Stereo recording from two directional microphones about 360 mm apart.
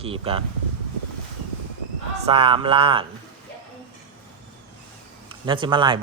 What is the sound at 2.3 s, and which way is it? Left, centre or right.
Speech, centre.